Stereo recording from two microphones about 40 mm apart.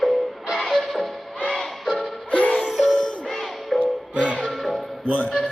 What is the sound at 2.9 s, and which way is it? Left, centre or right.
Music, left.